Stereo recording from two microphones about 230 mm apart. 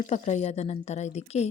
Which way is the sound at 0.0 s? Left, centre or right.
Left.